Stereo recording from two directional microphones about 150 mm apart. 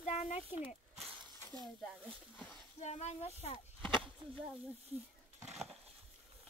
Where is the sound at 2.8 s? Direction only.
50° left (ahead or behind).